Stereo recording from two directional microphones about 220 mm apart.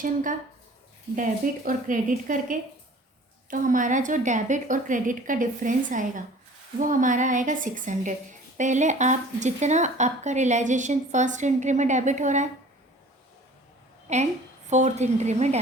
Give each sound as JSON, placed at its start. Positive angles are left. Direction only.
{"t": 0.0, "sound": "speech", "side_deg": -35}
{"t": 14.1, "sound": "speech", "side_deg": -30}